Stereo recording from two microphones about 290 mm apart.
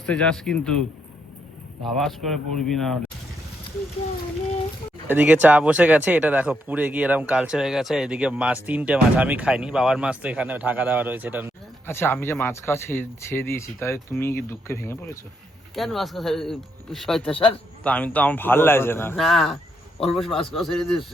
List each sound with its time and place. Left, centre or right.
0.0 s speech: centre
5.0 s speech: centre
11.9 s speech: centre
17.3 s speech: centre
17.8 s speech: centre